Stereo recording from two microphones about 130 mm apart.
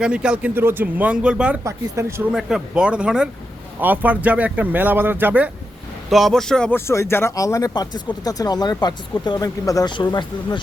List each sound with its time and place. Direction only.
0.0 s speech: 5° right (ahead or behind)
1.6 s speech: 20° right (ahead or behind)
2.3 s speech: 5° right (ahead or behind)
6.1 s speech: centre (ahead or behind)
6.7 s speech: 20° left (ahead or behind); by 10.6 s 35° left (ahead or behind)